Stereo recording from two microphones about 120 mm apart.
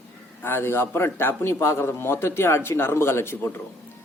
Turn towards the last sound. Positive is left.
turn(degrees=20)  # may be behind; listen again after turning